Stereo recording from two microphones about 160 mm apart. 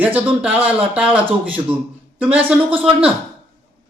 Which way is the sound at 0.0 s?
10° right (ahead or behind).